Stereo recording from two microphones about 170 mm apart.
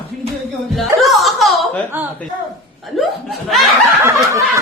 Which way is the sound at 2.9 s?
Centre (ahead or behind).